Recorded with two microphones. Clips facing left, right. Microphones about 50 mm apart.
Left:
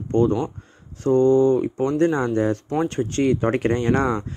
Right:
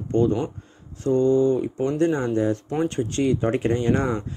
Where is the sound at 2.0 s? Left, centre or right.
Left.